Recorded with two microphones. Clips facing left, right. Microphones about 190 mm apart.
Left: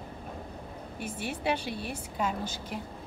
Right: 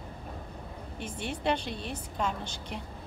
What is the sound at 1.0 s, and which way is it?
A woman's voice, 5° left (ahead or behind).